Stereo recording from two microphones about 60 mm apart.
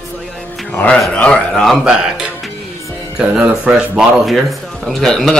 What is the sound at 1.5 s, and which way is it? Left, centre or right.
Speech, centre.